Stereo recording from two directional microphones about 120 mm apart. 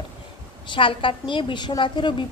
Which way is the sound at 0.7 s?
45° left (ahead or behind).